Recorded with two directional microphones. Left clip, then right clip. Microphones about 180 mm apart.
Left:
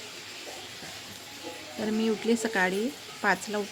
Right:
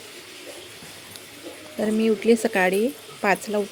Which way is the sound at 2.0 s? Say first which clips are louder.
Right 8 dB; 20° right (ahead or behind).